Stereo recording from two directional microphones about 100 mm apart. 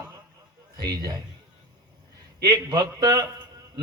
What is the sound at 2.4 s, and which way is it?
Speech, 40° right (ahead or behind).